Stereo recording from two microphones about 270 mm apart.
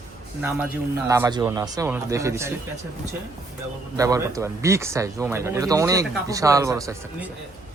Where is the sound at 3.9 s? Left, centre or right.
Centre.